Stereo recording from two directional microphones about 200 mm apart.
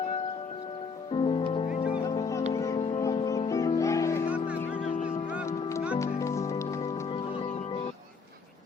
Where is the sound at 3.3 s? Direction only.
15° left (ahead or behind).